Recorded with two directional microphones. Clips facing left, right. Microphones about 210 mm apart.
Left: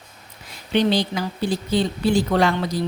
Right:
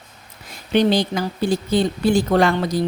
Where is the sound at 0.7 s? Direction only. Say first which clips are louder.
Right 2 dB; 45° right (ahead or behind).